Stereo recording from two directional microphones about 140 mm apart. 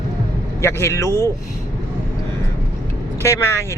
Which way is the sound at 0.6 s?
20° left (ahead or behind).